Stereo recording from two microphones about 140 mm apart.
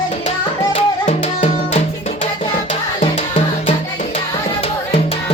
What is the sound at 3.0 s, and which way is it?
Music, 55° left (ahead or behind).